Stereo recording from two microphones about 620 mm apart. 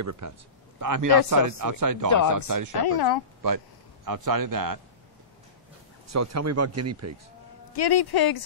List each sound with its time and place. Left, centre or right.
0.0 s speech: right
2.9 s a man's voice: left
3.4 s a man's voice: right
6.0 s speech: right
7.7 s a man's voice: left